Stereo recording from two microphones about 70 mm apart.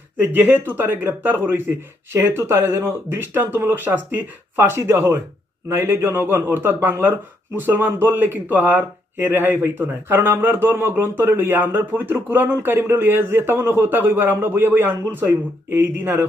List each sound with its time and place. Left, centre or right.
0.2 s speech: right
2.1 s speech: right